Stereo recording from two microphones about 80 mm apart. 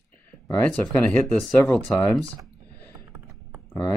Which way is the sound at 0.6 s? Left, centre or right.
Centre.